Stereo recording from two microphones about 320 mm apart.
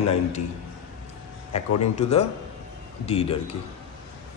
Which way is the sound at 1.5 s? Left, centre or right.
Left.